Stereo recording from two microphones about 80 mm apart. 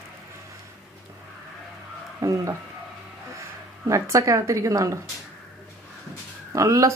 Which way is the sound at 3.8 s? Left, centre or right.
Right.